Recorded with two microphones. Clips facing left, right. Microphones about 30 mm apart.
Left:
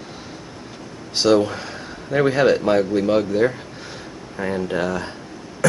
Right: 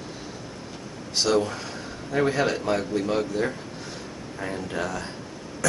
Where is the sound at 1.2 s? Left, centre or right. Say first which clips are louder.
Left 6 dB; left.